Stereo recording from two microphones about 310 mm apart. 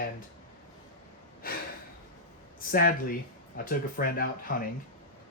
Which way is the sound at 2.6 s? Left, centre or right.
Left.